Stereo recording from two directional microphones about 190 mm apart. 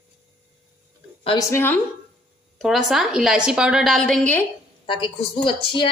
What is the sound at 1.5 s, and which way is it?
Speech, 10° left (ahead or behind).